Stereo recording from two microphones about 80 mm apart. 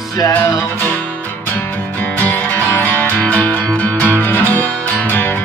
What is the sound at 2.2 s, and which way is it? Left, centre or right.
Music, left.